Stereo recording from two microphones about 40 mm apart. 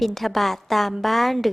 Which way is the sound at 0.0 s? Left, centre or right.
Centre.